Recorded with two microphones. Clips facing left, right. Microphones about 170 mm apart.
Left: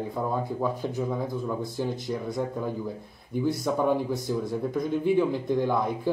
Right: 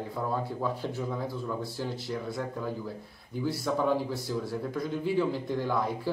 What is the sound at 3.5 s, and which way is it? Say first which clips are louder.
Speech: left 2 dB; 20° left (ahead or behind).